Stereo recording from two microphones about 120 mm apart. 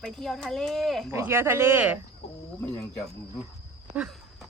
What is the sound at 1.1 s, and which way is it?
Speech, 20° right (ahead or behind).